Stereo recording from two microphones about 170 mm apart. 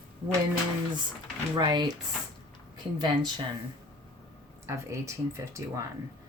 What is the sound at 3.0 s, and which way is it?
Speech, 25° right (ahead or behind).